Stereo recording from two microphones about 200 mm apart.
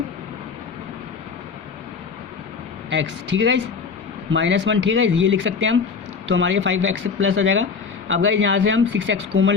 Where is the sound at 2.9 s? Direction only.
65° right (ahead or behind).